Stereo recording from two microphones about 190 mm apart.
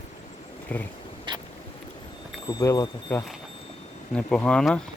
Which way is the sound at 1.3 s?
25° right (ahead or behind).